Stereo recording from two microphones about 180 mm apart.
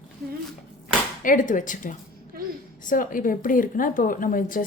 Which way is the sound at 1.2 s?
45° left (ahead or behind).